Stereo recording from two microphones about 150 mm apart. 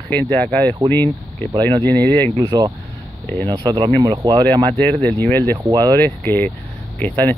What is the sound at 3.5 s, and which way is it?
Speech, 35° right (ahead or behind).